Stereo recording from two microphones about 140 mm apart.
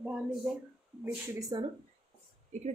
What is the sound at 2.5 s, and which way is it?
Speech, 60° right (ahead or behind).